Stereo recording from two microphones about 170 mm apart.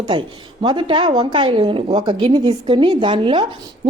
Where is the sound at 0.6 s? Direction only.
25° right (ahead or behind).